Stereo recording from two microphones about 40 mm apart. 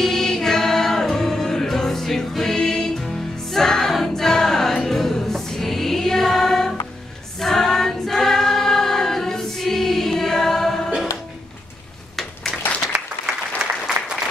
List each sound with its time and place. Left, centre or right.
0.0 s music: centre
3.9 s choir: centre
5.2 s music: centre
7.3 s choir: centre
13.6 s applause: centre